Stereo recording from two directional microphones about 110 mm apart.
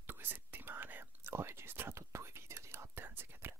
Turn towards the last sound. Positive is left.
turn(degrees=-20)  # may be behind; listen again after turning